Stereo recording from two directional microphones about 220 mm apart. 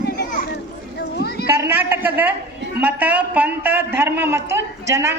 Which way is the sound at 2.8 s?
5° right (ahead or behind).